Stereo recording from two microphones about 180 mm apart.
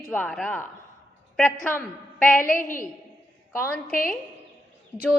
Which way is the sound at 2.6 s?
50° left (ahead or behind).